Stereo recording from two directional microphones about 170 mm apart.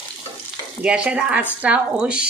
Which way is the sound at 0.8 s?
5° right (ahead or behind).